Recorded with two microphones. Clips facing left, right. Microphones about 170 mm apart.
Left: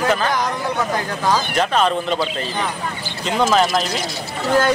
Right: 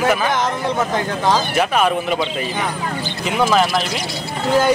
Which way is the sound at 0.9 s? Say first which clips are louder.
Right 1 dB; 20° right (ahead or behind).